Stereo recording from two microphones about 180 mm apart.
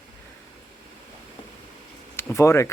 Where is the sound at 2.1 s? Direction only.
15° left (ahead or behind).